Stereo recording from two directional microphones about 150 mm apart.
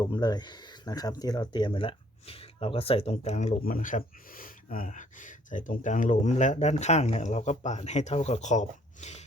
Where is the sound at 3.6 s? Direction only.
65° left (ahead or behind).